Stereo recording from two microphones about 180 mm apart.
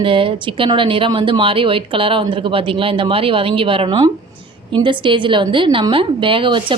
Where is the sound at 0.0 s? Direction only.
30° right (ahead or behind).